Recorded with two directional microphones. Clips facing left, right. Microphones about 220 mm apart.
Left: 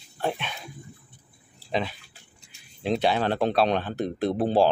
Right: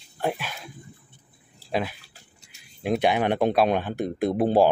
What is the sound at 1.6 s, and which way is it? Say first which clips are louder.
Speech: right 1 dB; 5° right (ahead or behind).